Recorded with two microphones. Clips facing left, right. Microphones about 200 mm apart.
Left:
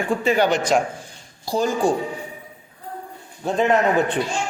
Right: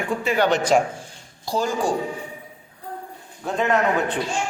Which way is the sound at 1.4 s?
10° left (ahead or behind).